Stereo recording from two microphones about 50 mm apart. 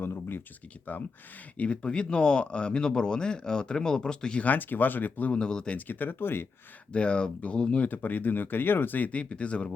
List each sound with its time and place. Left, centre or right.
0.0 s a sound: left
0.9 s speech: left; by 4.4 s centre
4.4 s speech: left
5.3 s speech: centre
5.7 s speech: left
6.9 s speech: left
7.9 s speech: left